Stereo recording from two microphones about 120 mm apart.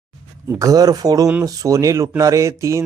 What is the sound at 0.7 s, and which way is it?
Speech, 30° right (ahead or behind).